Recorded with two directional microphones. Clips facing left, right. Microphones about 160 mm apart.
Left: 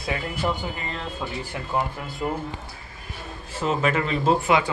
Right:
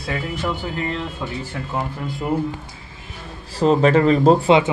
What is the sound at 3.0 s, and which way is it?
A man's voice, 35° right (ahead or behind).